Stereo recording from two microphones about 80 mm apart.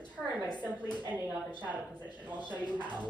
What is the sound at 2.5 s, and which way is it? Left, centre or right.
Speech, centre.